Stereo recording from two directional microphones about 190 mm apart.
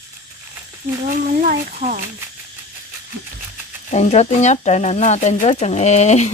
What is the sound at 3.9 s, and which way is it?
Speech, 35° left (ahead or behind).